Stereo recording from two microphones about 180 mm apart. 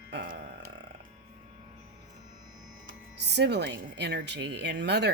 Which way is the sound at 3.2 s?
70° right (ahead or behind).